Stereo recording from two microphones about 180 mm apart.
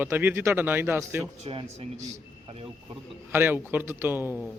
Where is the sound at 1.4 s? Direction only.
35° right (ahead or behind).